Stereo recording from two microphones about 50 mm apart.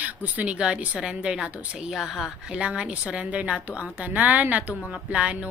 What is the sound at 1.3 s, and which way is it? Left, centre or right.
Speech, centre.